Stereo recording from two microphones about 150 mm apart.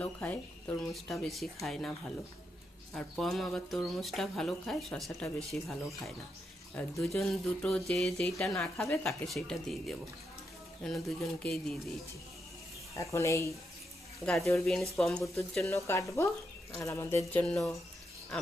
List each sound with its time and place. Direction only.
0.0 s speech: 10° left (ahead or behind)
0.8 s speech: centre (ahead or behind)
7.0 s speech: centre (ahead or behind)
13.0 s speech: 20° left (ahead or behind)
14.3 s speech: centre (ahead or behind)
15.6 s speech: 20° left (ahead or behind)
17.4 s speech: centre (ahead or behind)